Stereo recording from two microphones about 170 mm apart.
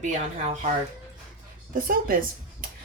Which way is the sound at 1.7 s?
60° right (ahead or behind).